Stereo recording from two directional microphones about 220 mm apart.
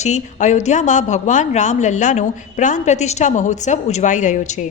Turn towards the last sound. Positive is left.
turn(degrees=35)  # may be behind; listen again after turning